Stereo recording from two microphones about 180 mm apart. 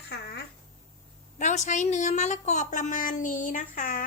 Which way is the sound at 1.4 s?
40° left (ahead or behind).